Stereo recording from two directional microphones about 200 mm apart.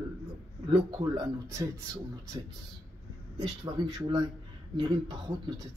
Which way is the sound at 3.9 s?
20° right (ahead or behind).